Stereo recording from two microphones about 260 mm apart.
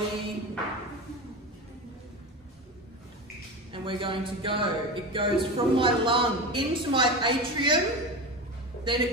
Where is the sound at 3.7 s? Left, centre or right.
Centre.